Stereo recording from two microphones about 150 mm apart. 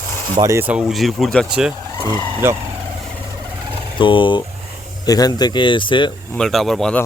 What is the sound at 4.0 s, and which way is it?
Speech, 35° left (ahead or behind).